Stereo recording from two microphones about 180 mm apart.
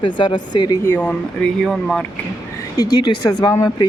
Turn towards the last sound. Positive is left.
turn(degrees=20)  # may be behind; listen again after turning